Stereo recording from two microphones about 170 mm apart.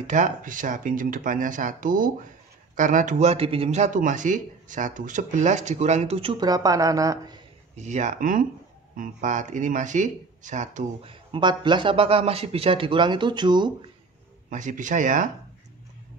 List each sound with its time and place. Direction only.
0.0 s speech: 45° right (ahead or behind); by 7.3 s 20° right (ahead or behind)
7.7 s speech: 45° right (ahead or behind)
11.1 s speech: 30° right (ahead or behind)
14.5 s speech: 50° right (ahead or behind)